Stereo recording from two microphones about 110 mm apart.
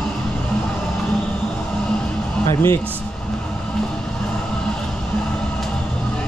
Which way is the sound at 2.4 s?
25° left (ahead or behind).